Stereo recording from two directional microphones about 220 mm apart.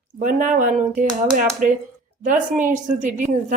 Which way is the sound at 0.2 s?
35° right (ahead or behind).